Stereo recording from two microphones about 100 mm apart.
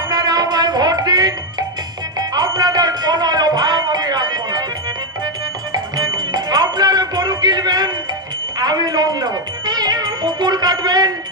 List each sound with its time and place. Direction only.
0.1 s music: 40° right (ahead or behind)